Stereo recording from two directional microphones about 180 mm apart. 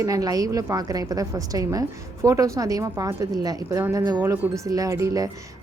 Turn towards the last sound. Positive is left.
turn(degrees=-20)  # may be behind; listen again after turning